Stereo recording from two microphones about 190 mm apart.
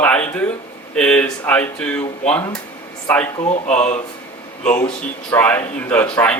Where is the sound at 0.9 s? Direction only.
5° left (ahead or behind).